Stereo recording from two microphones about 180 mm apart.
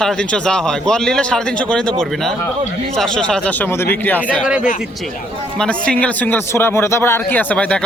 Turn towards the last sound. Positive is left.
turn(degrees=5)  # may be behind; listen again after turning